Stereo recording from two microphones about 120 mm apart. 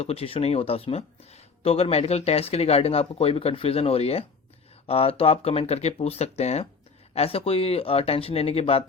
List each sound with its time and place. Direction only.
0.0 s speech: 55° left (ahead or behind)